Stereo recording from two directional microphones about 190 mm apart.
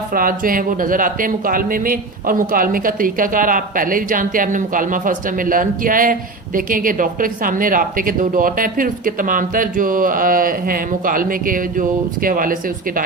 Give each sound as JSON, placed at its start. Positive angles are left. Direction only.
{"t": 0.1, "sound": "speech", "side_deg": -50}